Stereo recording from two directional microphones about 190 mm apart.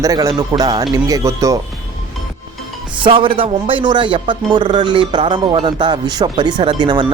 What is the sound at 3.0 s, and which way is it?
A man's voice, 25° right (ahead or behind).